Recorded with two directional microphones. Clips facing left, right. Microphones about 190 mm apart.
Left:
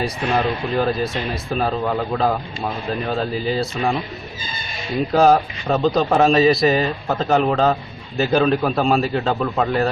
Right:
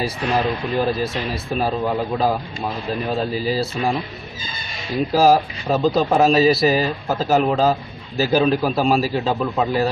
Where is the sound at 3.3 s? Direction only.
Centre (ahead or behind).